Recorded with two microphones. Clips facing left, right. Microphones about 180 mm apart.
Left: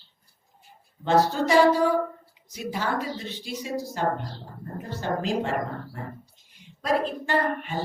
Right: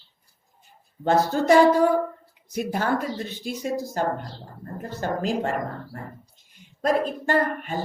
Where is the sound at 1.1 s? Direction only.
45° right (ahead or behind).